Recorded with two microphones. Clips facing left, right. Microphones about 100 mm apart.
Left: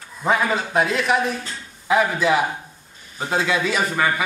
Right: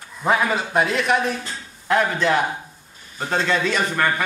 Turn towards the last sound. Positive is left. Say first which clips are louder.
# even
turn(degrees=5)  # may be behind; listen again after turning